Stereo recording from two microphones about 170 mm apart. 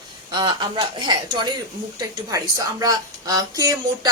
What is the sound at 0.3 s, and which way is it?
Speech, 25° right (ahead or behind).